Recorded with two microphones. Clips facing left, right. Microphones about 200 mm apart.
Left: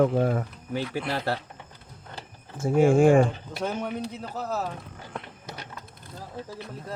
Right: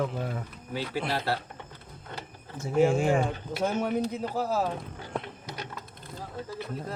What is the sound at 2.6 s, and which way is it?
Speech, 50° left (ahead or behind).